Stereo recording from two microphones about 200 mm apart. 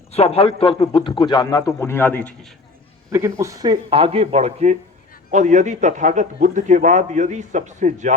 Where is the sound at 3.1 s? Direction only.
15° right (ahead or behind).